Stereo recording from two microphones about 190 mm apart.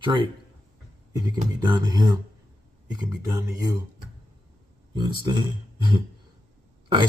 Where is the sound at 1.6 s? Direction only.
20° right (ahead or behind).